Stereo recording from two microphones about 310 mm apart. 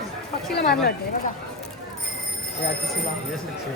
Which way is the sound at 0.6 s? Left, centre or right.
Left.